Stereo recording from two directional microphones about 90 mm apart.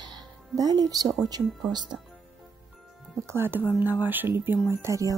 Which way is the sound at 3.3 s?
25° right (ahead or behind).